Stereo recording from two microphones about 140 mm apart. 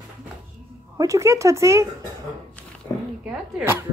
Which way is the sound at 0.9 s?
20° right (ahead or behind).